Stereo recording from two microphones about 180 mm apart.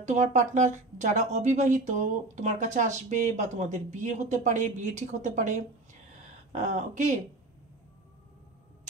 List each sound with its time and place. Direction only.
0.0 s speech: 40° right (ahead or behind)